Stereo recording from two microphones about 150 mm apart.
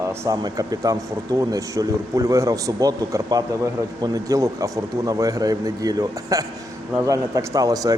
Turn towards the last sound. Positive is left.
turn(degrees=-25)  # may be behind; listen again after turning